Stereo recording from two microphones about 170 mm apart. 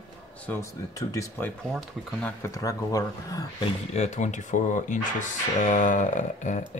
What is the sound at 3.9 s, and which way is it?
Speech, 45° left (ahead or behind).